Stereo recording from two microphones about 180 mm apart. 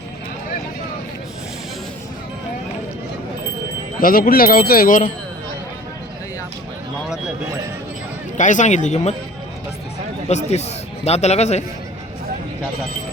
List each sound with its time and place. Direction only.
4.0 s speech: 50° left (ahead or behind)
8.4 s speech: 45° left (ahead or behind)
10.2 s speech: 40° left (ahead or behind)